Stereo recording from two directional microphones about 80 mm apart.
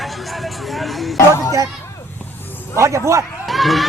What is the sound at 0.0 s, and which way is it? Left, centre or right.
Vehicle, centre.